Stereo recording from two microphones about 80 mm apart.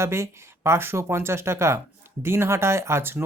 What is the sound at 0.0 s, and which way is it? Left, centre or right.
Speech, right.